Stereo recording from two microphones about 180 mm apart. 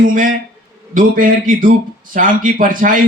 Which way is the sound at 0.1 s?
50° right (ahead or behind).